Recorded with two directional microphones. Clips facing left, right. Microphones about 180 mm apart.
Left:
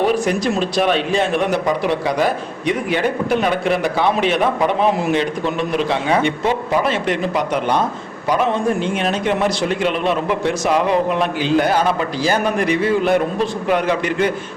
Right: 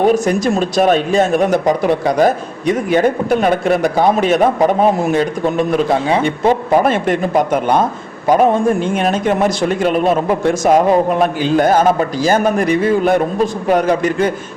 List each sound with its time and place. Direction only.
0.0 s a man's voice: 45° right (ahead or behind)